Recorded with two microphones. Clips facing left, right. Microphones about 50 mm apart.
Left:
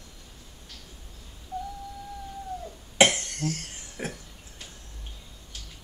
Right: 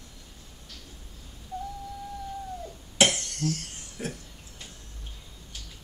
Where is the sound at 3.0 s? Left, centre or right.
Left.